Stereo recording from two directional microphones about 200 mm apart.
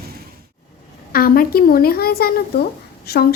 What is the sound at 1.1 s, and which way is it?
A woman's voice, 45° left (ahead or behind).